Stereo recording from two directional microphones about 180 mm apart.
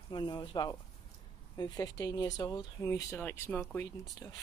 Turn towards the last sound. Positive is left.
turn(degrees=15)  # may be behind; listen again after turning